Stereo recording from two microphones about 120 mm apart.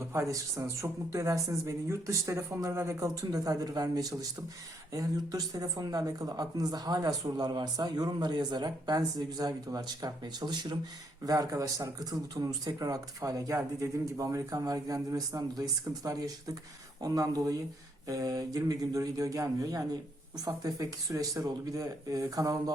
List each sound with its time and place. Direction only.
0.1 s speech: 25° right (ahead or behind)